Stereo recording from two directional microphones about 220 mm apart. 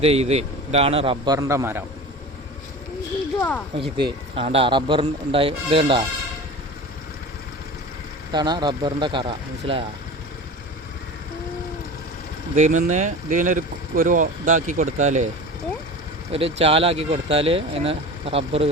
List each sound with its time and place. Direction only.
0.0 s speech: 30° right (ahead or behind); by 1.8 s 10° right (ahead or behind)
3.8 s speech: 25° right (ahead or behind)
8.3 s speech: 20° right (ahead or behind)
12.5 s speech: 35° right (ahead or behind)
16.3 s speech: 25° right (ahead or behind)